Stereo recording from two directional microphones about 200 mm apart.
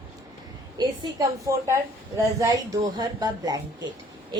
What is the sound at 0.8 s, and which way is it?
A woman's voice, 20° right (ahead or behind).